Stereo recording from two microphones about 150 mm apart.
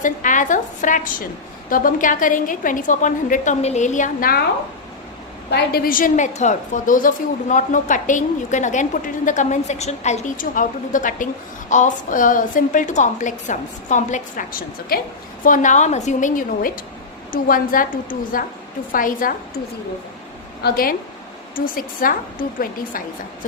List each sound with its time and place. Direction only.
0.0 s a woman's voice: 60° left (ahead or behind)
5.5 s a woman's voice: 85° left
15.4 s a woman's voice: 60° left (ahead or behind)
20.7 s a woman's voice: 75° left (ahead or behind)